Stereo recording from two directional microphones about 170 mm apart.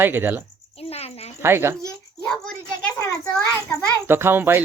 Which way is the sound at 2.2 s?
5° left (ahead or behind).